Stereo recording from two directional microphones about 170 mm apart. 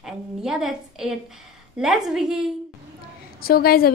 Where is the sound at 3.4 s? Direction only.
60° left (ahead or behind).